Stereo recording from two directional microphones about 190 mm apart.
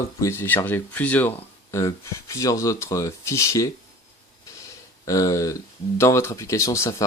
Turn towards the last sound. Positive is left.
turn(degrees=15)  # may be behind; listen again after turning